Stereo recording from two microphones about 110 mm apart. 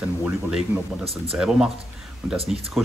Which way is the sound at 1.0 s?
65° right (ahead or behind).